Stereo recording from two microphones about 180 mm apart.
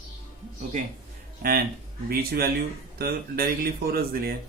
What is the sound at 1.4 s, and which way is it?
Speech, 55° right (ahead or behind).